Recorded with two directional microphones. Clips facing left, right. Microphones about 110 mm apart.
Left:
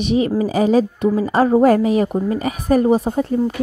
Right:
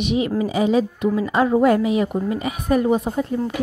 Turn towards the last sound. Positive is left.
turn(degrees=30)  # may be behind; listen again after turning